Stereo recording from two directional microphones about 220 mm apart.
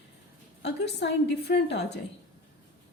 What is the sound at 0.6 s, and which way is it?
A woman's voice, 50° left (ahead or behind).